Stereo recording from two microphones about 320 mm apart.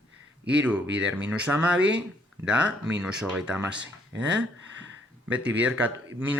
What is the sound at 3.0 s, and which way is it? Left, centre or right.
Speech, centre.